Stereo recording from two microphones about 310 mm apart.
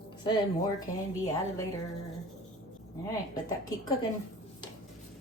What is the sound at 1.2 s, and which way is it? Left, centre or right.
Speech, centre.